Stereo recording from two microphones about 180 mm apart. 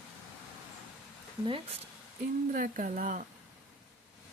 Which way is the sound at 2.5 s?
50° right (ahead or behind).